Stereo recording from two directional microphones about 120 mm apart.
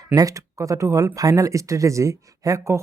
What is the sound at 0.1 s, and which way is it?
Speech, 30° right (ahead or behind).